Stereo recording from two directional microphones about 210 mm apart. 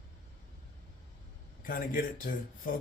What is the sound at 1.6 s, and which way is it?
A man's voice, 40° left (ahead or behind).